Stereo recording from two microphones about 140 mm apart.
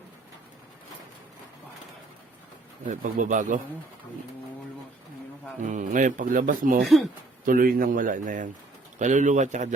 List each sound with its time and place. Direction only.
2.8 s a man's voice: 70° right (ahead or behind)
5.5 s speech: 65° right (ahead or behind); by 6.8 s 80° right
6.8 s speech: centre (ahead or behind)
7.4 s a man's voice: 85° right; by 9.6 s 60° right (ahead or behind)